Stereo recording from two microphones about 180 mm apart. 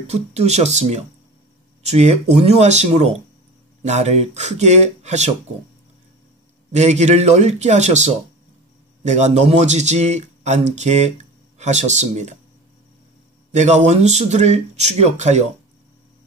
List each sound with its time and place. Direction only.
0.0 s speech: 35° right (ahead or behind)
6.7 s speech: 40° right (ahead or behind)
13.5 s speech: 40° right (ahead or behind)